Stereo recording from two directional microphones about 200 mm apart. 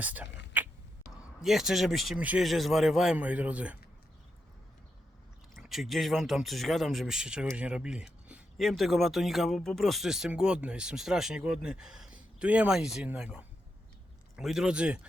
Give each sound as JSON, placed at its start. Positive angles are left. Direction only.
{"t": 0.0, "sound": "speech", "side_deg": -10}
{"t": 5.5, "sound": "speech", "side_deg": 0}